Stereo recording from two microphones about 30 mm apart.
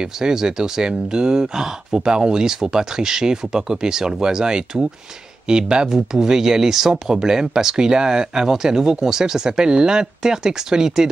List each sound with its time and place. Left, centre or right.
0.0 s speech: right